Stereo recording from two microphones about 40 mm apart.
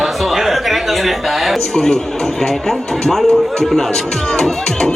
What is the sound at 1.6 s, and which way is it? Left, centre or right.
A man's voice, centre.